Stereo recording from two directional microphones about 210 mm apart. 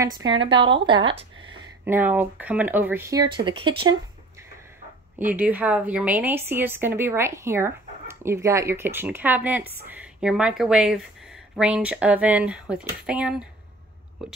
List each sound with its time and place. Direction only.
0.3 s speech: 25° right (ahead or behind)
1.9 s a woman's voice: 10° right (ahead or behind)
5.2 s a woman's voice: 10° right (ahead or behind)